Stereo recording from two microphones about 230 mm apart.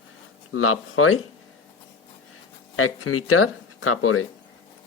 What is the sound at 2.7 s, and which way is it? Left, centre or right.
Speech, left.